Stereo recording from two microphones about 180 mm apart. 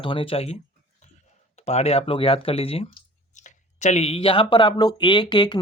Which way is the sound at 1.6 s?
35° left (ahead or behind).